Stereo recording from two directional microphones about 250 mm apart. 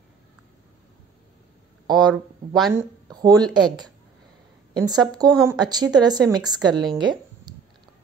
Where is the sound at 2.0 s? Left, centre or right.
Centre.